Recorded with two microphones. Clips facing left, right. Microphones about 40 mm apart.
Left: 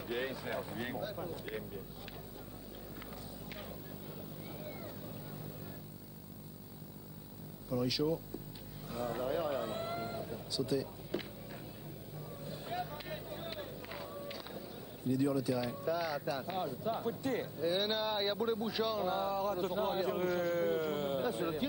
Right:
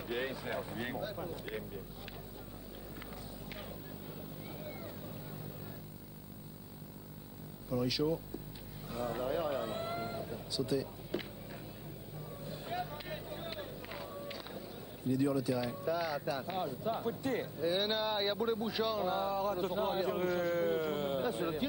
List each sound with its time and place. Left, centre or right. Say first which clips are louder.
0.0 s speech: even; centre
3.0 s run: right 1 dB; centre
4.6 s vehicle: right 1 dB; centre
7.7 s a man's voice: even; centre
8.8 s vehicle: even; centre
15.0 s a man's voice: even; centre